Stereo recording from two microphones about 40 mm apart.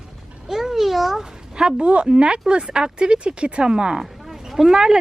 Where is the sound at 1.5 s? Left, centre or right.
Right.